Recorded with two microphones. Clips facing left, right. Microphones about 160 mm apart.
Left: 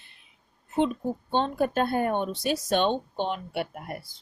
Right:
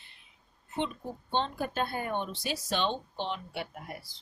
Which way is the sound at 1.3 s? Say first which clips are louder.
Left 6 dB; 50° left (ahead or behind).